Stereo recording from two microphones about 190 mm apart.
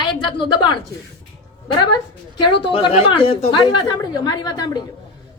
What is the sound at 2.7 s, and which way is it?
A woman's voice, 30° left (ahead or behind).